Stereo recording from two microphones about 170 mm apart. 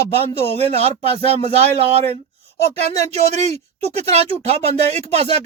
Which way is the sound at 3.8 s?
40° right (ahead or behind).